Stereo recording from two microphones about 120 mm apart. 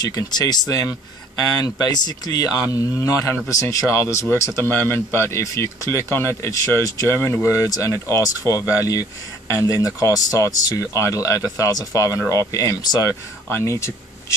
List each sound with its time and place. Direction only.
0.0 s speech: 35° left (ahead or behind)
13.5 s speech: 20° left (ahead or behind)